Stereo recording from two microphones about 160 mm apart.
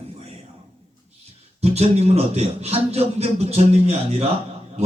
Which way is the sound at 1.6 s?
40° right (ahead or behind).